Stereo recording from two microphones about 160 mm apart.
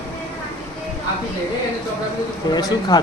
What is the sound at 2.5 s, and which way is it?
Speech, 25° left (ahead or behind).